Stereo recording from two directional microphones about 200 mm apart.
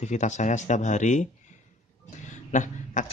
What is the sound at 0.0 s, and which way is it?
Speech, 35° left (ahead or behind).